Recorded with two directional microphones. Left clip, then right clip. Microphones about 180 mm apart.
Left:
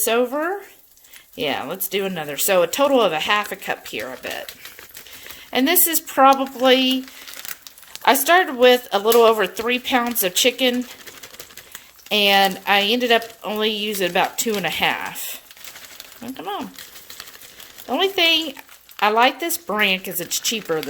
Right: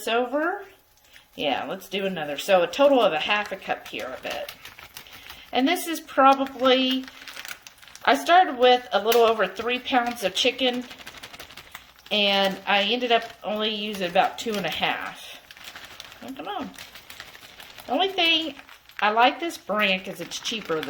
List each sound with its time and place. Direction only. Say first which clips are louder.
0.0 s speech: left 4 dB; 70° left (ahead or behind)
5.5 s speech: left 4 dB; 70° left (ahead or behind)
8.0 s speech: left 2 dB; 75° left (ahead or behind)
12.0 s speech: left 6 dB; 75° left (ahead or behind)
16.4 s speech: left 4 dB; 65° left (ahead or behind)
17.9 s speech: left 4 dB; 75° left (ahead or behind)